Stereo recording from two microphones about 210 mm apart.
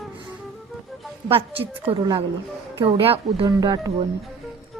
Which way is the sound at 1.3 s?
25° right (ahead or behind).